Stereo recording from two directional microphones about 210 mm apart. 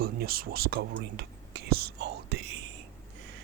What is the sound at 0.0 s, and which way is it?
Speech, 45° right (ahead or behind).